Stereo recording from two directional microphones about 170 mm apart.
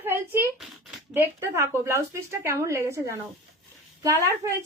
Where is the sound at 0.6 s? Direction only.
Centre (ahead or behind).